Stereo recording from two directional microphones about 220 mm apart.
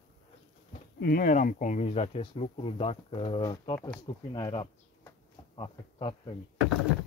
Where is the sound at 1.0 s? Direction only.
45° left (ahead or behind); by 6.4 s 20° left (ahead or behind).